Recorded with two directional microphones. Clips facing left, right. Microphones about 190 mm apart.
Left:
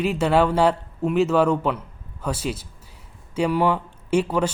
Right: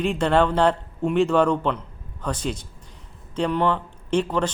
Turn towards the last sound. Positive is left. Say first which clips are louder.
# left 1 dB
turn(degrees=10)  # may be behind; listen again after turning